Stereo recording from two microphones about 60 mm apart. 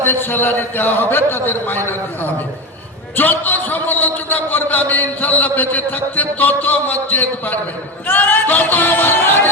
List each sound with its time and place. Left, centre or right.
0.0 s a man's voice: left
3.2 s a man's voice: left